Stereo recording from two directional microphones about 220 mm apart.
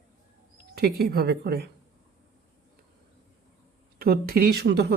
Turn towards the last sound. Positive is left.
turn(degrees=-50)  # may be behind; listen again after turning